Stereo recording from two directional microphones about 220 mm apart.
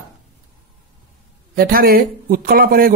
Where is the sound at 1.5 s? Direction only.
40° right (ahead or behind).